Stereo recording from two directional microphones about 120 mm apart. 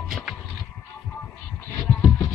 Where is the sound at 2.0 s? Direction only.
25° left (ahead or behind).